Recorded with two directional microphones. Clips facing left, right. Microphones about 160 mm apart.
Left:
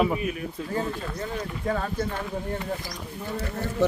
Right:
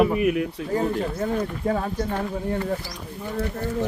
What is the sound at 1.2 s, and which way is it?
Speech, 50° right (ahead or behind).